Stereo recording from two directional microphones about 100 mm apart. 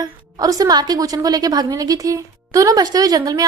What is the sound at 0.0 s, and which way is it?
A woman's voice, 40° right (ahead or behind).